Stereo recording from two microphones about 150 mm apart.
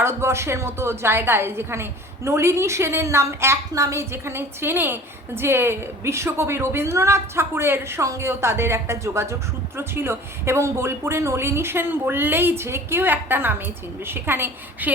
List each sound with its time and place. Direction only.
0.0 s a woman's voice: 15° right (ahead or behind)